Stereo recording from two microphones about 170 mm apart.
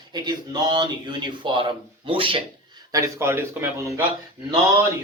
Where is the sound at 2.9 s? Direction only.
15° right (ahead or behind).